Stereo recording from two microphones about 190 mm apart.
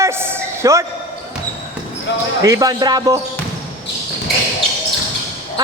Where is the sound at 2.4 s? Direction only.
20° right (ahead or behind).